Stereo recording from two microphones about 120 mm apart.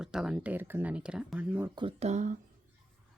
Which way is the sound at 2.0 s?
80° right.